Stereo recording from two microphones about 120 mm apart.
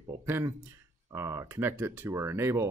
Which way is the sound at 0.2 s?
20° right (ahead or behind).